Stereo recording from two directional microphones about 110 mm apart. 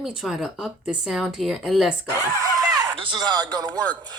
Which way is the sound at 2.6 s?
30° right (ahead or behind).